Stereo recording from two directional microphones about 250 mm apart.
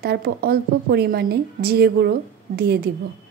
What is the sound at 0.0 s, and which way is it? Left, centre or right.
A woman's voice, right.